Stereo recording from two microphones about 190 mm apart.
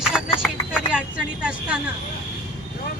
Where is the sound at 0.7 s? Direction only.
5° right (ahead or behind).